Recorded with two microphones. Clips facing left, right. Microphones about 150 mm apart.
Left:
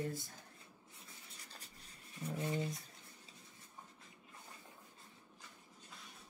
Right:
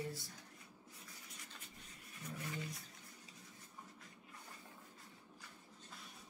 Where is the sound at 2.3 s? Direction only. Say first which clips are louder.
Left 8 dB; 25° left (ahead or behind).